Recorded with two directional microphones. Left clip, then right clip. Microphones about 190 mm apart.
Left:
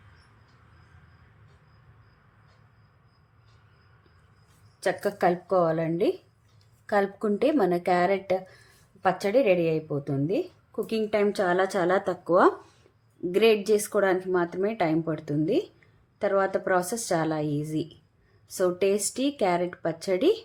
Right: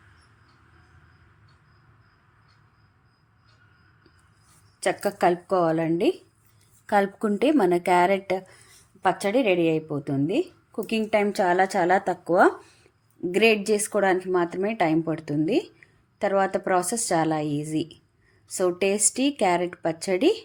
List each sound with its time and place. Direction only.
4.8 s a woman's voice: 10° right (ahead or behind)